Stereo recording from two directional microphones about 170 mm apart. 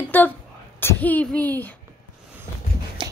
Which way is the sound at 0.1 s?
10° left (ahead or behind).